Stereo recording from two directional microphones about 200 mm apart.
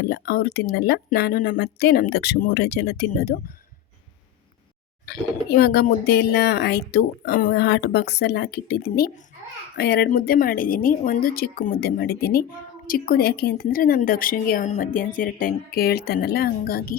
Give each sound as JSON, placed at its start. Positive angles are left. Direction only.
{"t": 0.0, "sound": "a woman's voice", "side_deg": 55}
{"t": 5.0, "sound": "a woman's voice", "side_deg": 50}